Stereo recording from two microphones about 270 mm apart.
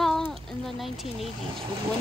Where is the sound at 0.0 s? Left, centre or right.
Centre.